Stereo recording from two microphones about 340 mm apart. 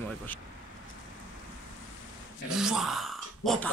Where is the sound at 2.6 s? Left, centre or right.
Centre.